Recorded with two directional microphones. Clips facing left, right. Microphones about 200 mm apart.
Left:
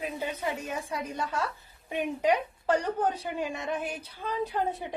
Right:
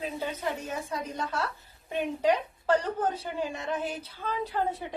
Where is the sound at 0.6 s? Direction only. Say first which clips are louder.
Even; 10° left (ahead or behind).